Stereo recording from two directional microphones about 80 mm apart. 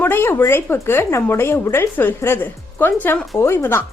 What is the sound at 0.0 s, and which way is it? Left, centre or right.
A woman's voice, left.